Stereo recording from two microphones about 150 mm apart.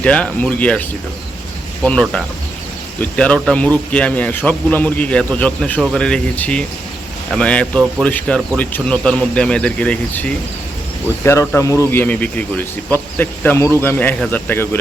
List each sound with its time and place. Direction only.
0.0 s a man's voice: 10° left (ahead or behind)